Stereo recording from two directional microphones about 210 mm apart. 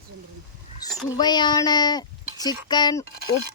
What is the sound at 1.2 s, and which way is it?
Speech, 20° left (ahead or behind).